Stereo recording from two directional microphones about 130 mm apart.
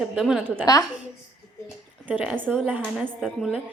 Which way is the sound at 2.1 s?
15° right (ahead or behind).